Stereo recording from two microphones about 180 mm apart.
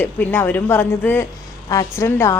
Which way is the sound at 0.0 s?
10° left (ahead or behind).